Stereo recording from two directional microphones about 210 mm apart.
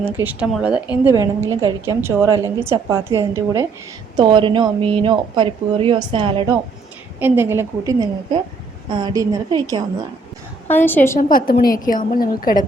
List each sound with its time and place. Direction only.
0.2 s a woman's voice: 5° right (ahead or behind); by 6.6 s 20° right (ahead or behind)
7.2 s a woman's voice: 10° right (ahead or behind)
10.7 s a woman's voice: 10° left (ahead or behind)
11.2 s a woman's voice: 40° left (ahead or behind)